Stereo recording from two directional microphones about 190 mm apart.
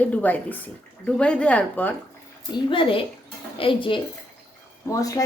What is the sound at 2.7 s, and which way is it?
A woman's voice, 25° left (ahead or behind).